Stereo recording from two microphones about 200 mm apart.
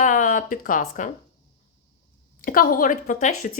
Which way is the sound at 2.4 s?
45° left (ahead or behind).